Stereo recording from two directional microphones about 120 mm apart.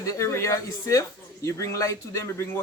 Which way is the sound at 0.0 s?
25° left (ahead or behind).